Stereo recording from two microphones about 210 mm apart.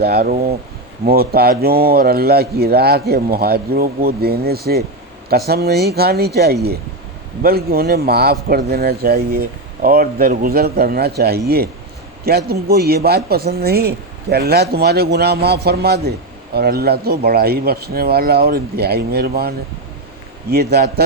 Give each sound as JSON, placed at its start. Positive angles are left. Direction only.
{"t": 0.0, "sound": "speech", "side_deg": -45}